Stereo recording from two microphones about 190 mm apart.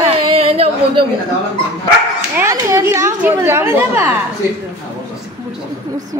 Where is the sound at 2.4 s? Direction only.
15° right (ahead or behind).